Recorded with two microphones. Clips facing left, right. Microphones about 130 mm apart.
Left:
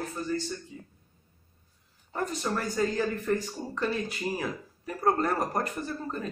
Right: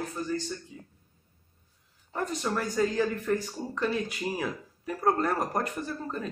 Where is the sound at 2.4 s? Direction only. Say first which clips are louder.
Right 1 dB; 5° right (ahead or behind).